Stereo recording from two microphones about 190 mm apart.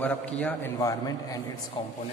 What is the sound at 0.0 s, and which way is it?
A man's voice, 5° left (ahead or behind).